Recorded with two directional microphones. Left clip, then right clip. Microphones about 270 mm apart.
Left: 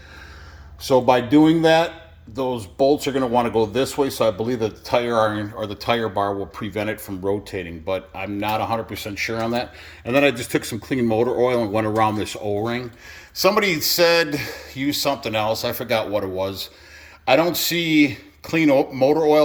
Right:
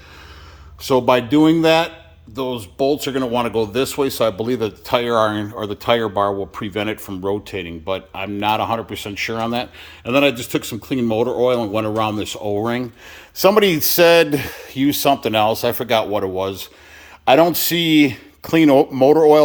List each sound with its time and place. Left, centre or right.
0.8 s speech: centre